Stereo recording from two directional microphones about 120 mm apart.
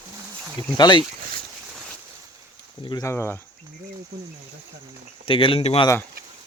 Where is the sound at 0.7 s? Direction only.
40° left (ahead or behind).